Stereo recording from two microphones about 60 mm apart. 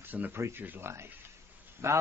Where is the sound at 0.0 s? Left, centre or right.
Right.